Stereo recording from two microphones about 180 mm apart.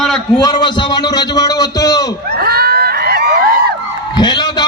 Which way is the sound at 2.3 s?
60° right (ahead or behind).